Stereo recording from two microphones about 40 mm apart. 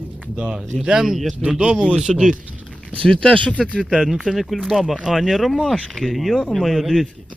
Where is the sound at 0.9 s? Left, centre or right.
Centre.